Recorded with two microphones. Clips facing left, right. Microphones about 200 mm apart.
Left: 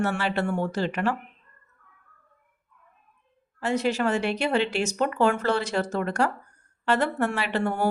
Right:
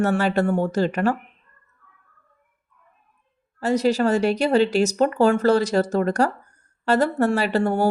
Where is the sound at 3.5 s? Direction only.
40° right (ahead or behind).